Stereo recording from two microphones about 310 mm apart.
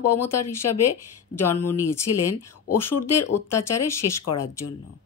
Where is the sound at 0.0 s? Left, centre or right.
Left.